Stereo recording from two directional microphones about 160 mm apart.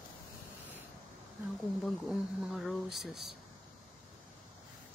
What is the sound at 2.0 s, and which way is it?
Speech, centre (ahead or behind).